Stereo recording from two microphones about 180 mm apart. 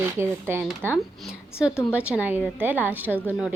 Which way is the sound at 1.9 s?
5° right (ahead or behind).